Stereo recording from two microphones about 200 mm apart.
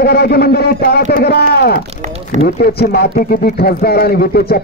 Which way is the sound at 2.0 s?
35° right (ahead or behind).